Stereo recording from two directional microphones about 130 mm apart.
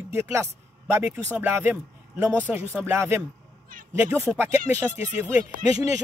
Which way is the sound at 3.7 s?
90° right.